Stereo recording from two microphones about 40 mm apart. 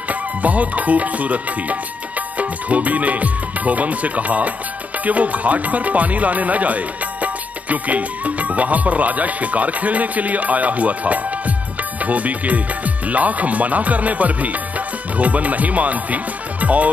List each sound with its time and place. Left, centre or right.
0.1 s music: right
2.3 s speech: right